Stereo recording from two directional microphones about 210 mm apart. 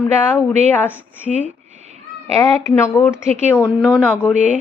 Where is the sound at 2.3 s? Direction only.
15° left (ahead or behind).